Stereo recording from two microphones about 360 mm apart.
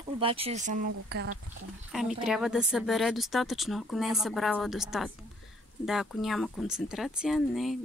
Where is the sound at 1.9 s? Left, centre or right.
Centre.